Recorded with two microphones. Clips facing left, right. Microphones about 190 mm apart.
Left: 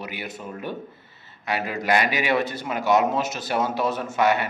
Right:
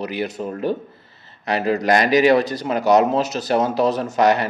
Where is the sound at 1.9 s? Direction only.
40° right (ahead or behind).